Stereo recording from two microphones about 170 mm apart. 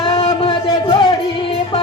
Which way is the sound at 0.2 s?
30° left (ahead or behind).